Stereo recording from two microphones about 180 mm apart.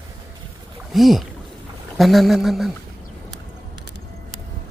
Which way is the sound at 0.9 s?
Centre (ahead or behind).